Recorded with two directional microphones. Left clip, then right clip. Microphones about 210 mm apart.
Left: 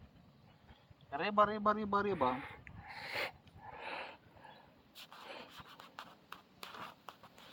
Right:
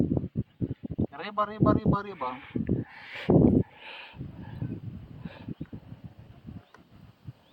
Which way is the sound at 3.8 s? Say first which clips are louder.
Right 1 dB; 5° left (ahead or behind).